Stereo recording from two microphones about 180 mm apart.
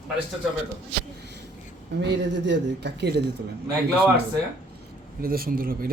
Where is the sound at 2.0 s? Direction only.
80° right.